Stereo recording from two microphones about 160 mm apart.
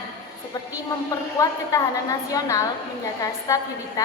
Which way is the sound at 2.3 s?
20° left (ahead or behind).